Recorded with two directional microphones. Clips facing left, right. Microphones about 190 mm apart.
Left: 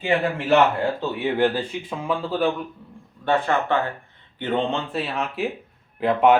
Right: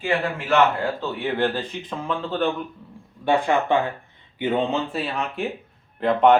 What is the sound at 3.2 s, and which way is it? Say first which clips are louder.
Speech: right 1 dB; 15° right (ahead or behind).